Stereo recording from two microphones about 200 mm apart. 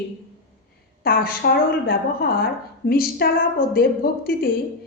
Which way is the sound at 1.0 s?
50° left (ahead or behind).